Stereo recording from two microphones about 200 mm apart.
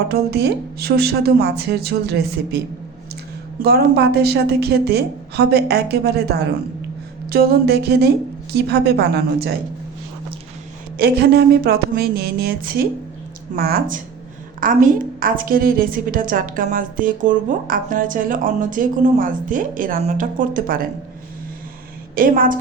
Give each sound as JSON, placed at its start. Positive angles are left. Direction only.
{"t": 0.1, "sound": "a woman's voice", "side_deg": -55}
{"t": 3.6, "sound": "a woman's voice", "side_deg": -55}
{"t": 10.9, "sound": "a woman's voice", "side_deg": -55}
{"t": 22.1, "sound": "a woman's voice", "side_deg": -45}